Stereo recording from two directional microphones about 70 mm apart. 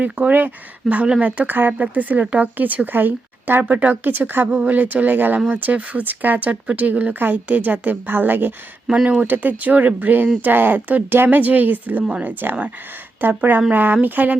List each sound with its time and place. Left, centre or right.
0.0 s speech: right
8.9 s speech: centre